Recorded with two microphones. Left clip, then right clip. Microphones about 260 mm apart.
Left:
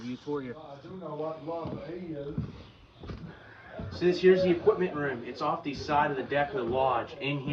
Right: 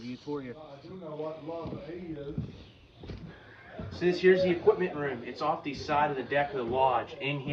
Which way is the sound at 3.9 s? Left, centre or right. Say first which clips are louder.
Left 1 dB; centre.